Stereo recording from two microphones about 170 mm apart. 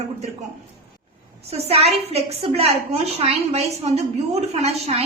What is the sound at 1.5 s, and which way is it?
A woman's voice, 40° right (ahead or behind).